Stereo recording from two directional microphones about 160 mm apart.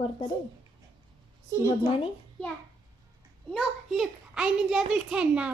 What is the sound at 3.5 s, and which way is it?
A child's voice, centre (ahead or behind).